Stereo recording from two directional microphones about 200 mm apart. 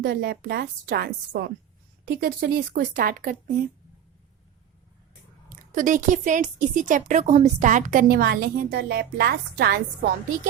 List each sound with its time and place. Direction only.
0.0 s a woman's voice: 55° right (ahead or behind)
5.7 s speech: 40° right (ahead or behind)